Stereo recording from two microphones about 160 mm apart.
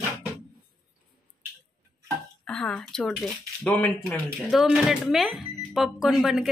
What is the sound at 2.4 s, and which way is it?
Speech, 5° left (ahead or behind).